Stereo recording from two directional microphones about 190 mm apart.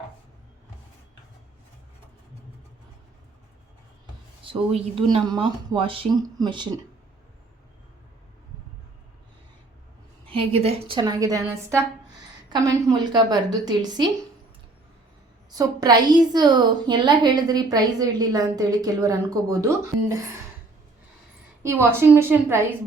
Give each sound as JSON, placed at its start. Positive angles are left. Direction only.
{"t": 4.4, "sound": "a woman's voice", "side_deg": -30}
{"t": 10.2, "sound": "a woman's voice", "side_deg": -30}
{"t": 15.4, "sound": "a woman's voice", "side_deg": -20}
{"t": 21.6, "sound": "a woman's voice", "side_deg": -10}